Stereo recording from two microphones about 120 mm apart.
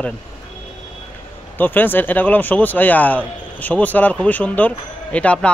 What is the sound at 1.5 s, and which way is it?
A man's voice, 15° left (ahead or behind).